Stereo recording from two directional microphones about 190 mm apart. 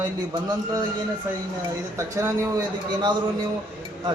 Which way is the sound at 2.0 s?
15° right (ahead or behind).